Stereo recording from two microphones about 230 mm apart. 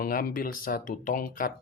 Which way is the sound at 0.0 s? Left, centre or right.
Left.